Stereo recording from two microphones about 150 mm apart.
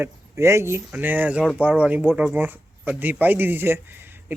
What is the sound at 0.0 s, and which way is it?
Speech, 20° right (ahead or behind).